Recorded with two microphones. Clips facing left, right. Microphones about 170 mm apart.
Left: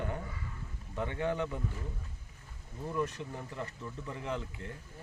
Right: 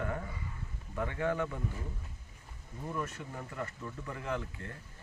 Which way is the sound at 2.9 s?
20° left (ahead or behind).